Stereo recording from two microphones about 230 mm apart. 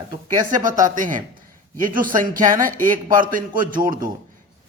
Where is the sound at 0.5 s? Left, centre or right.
Right.